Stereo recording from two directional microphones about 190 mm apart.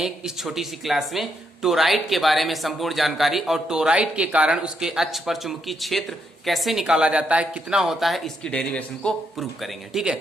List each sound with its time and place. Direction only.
0.0 s speech: centre (ahead or behind)